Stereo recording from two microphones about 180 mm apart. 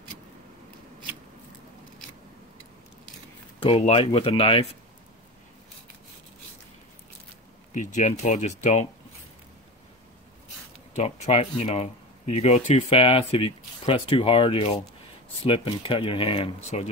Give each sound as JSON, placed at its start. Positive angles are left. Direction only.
{"t": 3.6, "sound": "speech", "side_deg": 35}
{"t": 7.7, "sound": "speech", "side_deg": 45}
{"t": 11.0, "sound": "speech", "side_deg": 40}